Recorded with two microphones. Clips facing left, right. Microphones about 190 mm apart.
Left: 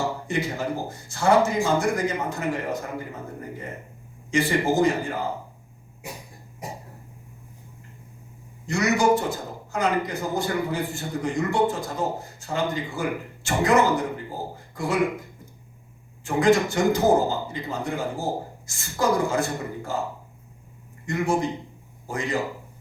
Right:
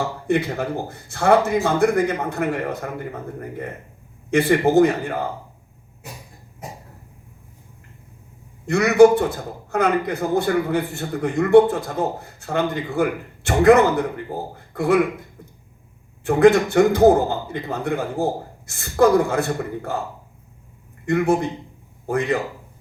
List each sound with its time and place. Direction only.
0.3 s a man's voice: 60° right (ahead or behind)
4.3 s a man's voice: 60° right (ahead or behind)
8.6 s a man's voice: 60° right (ahead or behind)
14.7 s a sound: 60° right (ahead or behind)
16.2 s a man's voice: 60° right (ahead or behind)
21.1 s a man's voice: 60° right (ahead or behind)